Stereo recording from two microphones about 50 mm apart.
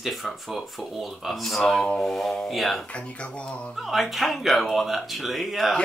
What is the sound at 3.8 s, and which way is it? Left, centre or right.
Speech, centre.